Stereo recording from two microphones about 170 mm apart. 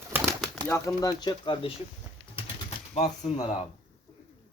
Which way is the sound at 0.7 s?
20° left (ahead or behind).